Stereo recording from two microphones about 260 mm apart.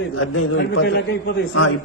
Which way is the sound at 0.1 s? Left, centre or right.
Left.